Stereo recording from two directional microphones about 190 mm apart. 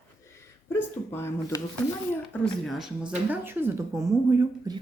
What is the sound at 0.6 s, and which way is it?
Speech, 10° left (ahead or behind).